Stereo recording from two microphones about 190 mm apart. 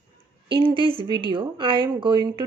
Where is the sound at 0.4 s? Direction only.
25° right (ahead or behind).